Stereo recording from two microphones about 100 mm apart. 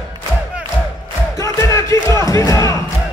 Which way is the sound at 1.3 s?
30° left (ahead or behind).